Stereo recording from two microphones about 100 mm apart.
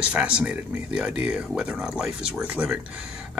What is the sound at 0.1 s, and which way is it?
Speech, 10° right (ahead or behind).